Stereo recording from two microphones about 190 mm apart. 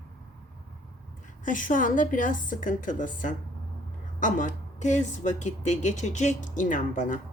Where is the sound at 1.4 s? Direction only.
45° left (ahead or behind).